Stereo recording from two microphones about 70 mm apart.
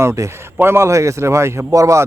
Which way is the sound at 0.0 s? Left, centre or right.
Right.